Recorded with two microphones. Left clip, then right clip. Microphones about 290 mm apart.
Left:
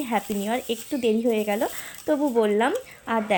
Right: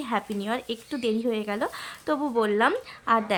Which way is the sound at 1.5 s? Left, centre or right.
Right.